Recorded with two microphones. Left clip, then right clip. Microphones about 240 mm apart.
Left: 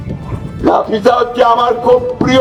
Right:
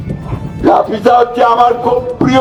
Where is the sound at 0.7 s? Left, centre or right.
Left.